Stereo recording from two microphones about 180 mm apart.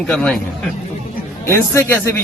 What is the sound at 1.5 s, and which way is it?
Speech, 15° left (ahead or behind).